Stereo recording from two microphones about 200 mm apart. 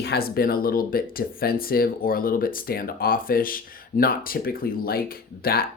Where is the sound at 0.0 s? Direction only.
50° left (ahead or behind).